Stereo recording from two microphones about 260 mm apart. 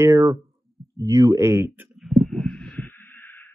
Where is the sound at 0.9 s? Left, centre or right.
Centre.